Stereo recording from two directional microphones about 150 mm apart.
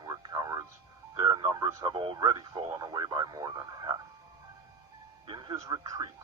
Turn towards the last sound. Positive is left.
turn(degrees=-30)  # may be behind; listen again after turning